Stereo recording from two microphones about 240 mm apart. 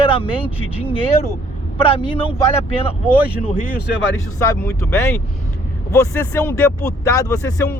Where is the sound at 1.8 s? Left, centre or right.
Left.